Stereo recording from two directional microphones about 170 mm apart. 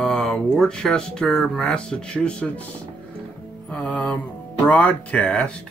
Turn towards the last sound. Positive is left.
turn(degrees=5)  # may be behind; listen again after turning